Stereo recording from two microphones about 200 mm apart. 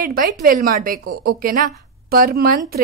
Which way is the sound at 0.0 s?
45° right (ahead or behind).